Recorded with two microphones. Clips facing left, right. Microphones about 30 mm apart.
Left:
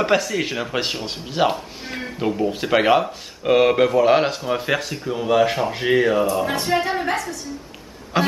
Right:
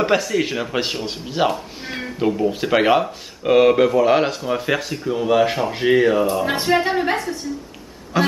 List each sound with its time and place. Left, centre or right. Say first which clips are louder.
0.0 s speech: right 1 dB; centre
6.4 s speech: right 2 dB; right
6.7 s a woman's voice: right 4 dB; centre
8.2 s a sound: right 1 dB; left